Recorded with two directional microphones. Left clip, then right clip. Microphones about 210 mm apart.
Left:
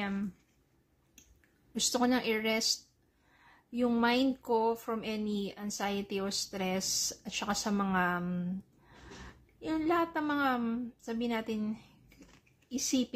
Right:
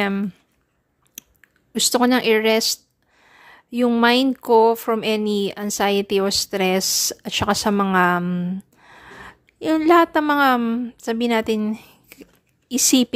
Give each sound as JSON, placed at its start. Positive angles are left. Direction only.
{"t": 0.0, "sound": "speech", "side_deg": -50}
{"t": 1.7, "sound": "speech", "side_deg": -40}